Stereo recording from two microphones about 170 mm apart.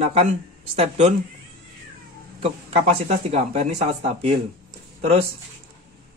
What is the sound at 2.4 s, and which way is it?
Speech, 35° right (ahead or behind).